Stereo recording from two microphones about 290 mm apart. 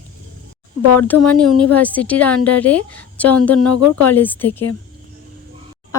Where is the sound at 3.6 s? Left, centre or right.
Left.